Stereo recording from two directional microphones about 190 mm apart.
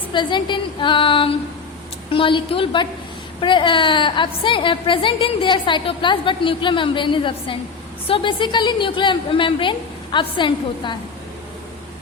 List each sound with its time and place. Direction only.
0.1 s a woman's voice: 25° left (ahead or behind)